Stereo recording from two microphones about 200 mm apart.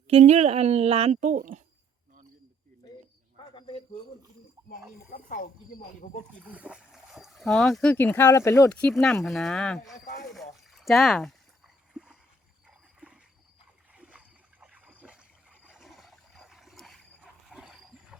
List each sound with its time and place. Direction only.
0.1 s a woman's voice: 35° right (ahead or behind)
3.3 s cricket: 25° left (ahead or behind)
4.7 s speech: 45° left (ahead or behind)
6.5 s speech: 5° right (ahead or behind)
10.3 s a sound: centre (ahead or behind)
13.9 s boat: 5° right (ahead or behind)